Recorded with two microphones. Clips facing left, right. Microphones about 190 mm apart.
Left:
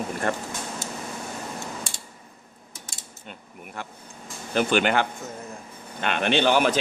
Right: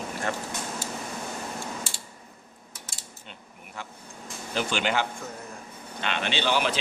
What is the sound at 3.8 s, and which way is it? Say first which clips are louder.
Vehicle: left 3 dB; 55° left (ahead or behind).